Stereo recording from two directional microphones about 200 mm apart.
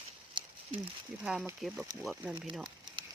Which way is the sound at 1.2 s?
5° right (ahead or behind).